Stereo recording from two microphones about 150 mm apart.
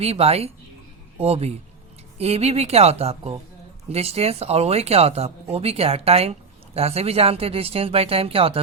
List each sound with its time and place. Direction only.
0.0 s speech: 45° right (ahead or behind)